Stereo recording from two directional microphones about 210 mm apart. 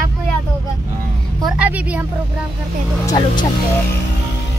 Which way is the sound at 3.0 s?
20° left (ahead or behind).